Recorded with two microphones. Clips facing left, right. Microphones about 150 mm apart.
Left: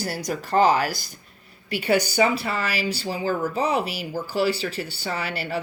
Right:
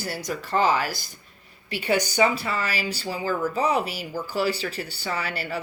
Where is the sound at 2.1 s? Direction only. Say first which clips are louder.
Left 1 dB; 35° left (ahead or behind).